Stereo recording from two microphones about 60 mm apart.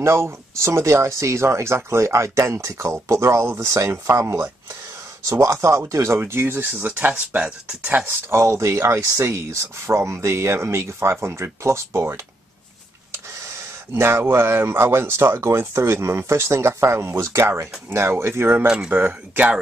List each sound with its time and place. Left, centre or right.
0.0 s speech: right
8.0 s speech: right
13.9 s speech: right